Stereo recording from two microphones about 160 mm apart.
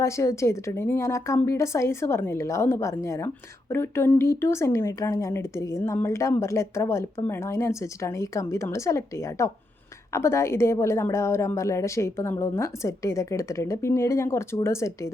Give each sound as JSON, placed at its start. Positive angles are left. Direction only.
{"t": 0.0, "sound": "a woman's voice", "side_deg": 15}